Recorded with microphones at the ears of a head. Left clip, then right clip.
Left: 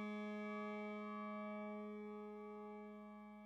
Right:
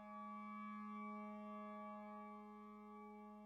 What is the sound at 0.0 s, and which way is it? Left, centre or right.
Music, left.